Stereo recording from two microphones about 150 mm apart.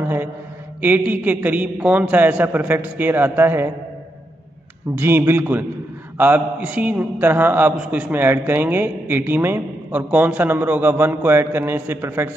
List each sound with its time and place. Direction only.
0.7 s a man's voice: 10° right (ahead or behind)
4.9 s a man's voice: 15° right (ahead or behind)